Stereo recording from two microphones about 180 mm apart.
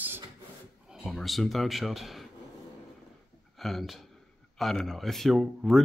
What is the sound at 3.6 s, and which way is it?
Speech, centre (ahead or behind).